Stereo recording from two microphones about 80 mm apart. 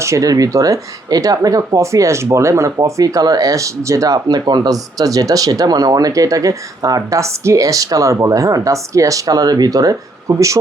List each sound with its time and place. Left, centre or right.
0.0 s speech: right